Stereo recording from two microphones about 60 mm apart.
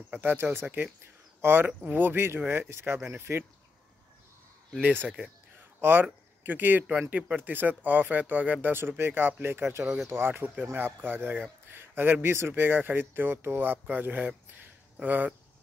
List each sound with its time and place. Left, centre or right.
0.2 s speech: right
1.7 s speech: right
4.8 s speech: right